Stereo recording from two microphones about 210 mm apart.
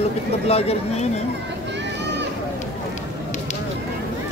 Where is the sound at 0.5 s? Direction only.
30° left (ahead or behind).